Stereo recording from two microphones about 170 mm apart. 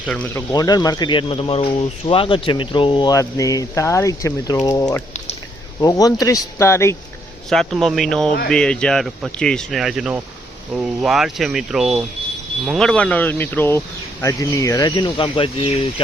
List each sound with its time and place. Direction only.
0.1 s speech: 10° left (ahead or behind)
0.5 s speech: 20° left (ahead or behind)
7.5 s speech: centre (ahead or behind); by 15.9 s 35° left (ahead or behind)